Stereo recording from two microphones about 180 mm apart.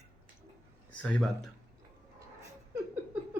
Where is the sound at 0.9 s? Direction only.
5° left (ahead or behind).